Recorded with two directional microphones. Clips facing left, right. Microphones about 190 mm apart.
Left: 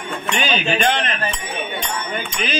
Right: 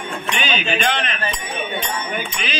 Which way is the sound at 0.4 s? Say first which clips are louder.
Left 3 dB; 45° left (ahead or behind).